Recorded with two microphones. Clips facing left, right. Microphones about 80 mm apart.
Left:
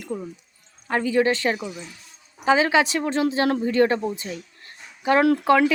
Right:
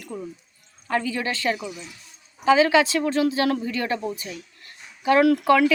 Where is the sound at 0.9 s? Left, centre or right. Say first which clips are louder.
Left 5 dB; left.